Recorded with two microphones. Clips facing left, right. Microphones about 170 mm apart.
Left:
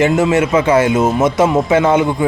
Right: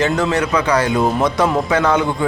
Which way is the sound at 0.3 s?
25° left (ahead or behind).